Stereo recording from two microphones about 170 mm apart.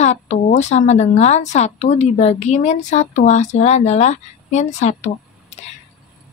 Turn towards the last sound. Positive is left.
turn(degrees=40)  # may be behind; listen again after turning